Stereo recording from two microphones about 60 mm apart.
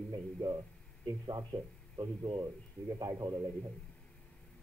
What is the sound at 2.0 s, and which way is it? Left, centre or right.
A man's voice, right.